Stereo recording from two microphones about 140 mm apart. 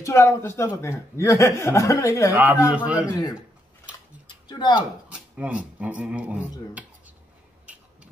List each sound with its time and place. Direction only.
0.0 s speech: 20° left (ahead or behind)
2.6 s speech: 10° right (ahead or behind)
3.1 s speech: 30° left (ahead or behind)
4.5 s speech: 30° left (ahead or behind)
5.1 s speech: 10° right (ahead or behind)